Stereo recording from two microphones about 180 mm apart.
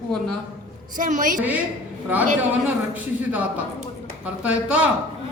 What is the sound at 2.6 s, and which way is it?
Speech, 10° right (ahead or behind).